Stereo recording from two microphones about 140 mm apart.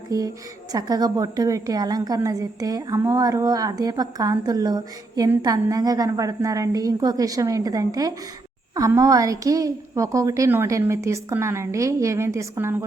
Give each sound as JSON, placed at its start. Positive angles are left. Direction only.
{"t": 0.1, "sound": "a woman's voice", "side_deg": -25}